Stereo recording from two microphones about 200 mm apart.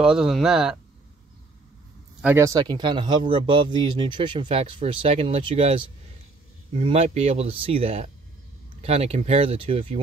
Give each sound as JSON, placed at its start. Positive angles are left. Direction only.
{"t": 0.0, "sound": "speech", "side_deg": -5}
{"t": 2.2, "sound": "speech", "side_deg": -15}